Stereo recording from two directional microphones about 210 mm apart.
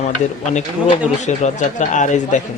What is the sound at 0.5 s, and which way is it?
Speech, 35° left (ahead or behind).